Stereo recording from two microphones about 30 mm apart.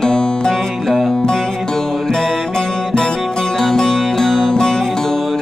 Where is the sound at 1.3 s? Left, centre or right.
Left.